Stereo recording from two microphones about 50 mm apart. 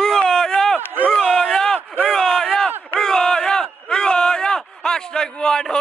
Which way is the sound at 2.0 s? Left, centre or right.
Centre.